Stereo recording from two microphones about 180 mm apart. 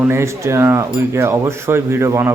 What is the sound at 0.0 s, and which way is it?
A man's voice, 15° right (ahead or behind).